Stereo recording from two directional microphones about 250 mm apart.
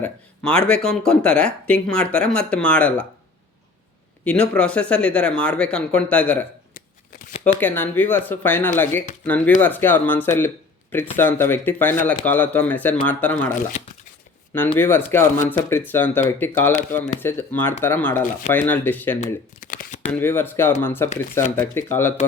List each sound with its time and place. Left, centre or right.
0.0 s speech: centre
4.2 s speech: centre
7.4 s speech: centre
14.8 s speech: centre
19.2 s speech: left
20.1 s speech: centre